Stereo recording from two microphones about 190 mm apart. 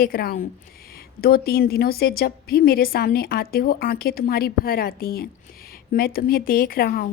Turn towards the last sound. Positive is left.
turn(degrees=50)  # may be behind; listen again after turning